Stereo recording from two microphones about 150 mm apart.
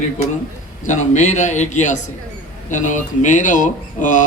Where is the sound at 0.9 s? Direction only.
50° left (ahead or behind).